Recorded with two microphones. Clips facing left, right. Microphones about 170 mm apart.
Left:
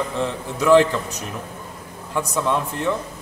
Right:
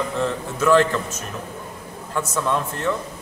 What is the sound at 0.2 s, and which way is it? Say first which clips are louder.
A man's voice: right 2 dB; 15° left (ahead or behind).